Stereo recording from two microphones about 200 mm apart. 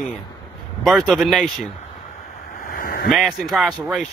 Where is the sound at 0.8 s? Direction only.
Centre (ahead or behind).